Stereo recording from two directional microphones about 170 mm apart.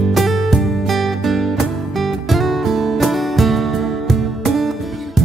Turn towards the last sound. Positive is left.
turn(degrees=0)  # may be behind; listen again after turning